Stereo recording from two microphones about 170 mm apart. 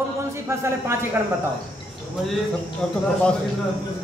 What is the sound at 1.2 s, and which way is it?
Speech, 10° right (ahead or behind).